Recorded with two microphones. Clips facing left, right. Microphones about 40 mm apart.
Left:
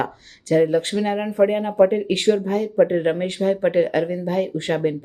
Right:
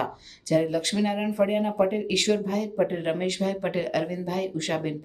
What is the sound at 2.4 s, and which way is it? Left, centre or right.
Speech, left.